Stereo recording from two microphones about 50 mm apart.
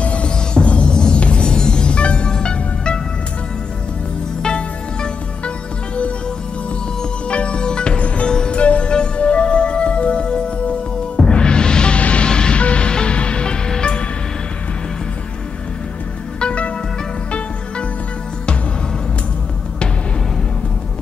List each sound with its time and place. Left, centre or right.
0.0 s music: left
4.4 s music: centre
7.2 s music: left
16.3 s music: left